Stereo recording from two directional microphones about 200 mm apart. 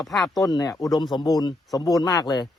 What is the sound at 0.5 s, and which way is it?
Speech, 15° left (ahead or behind).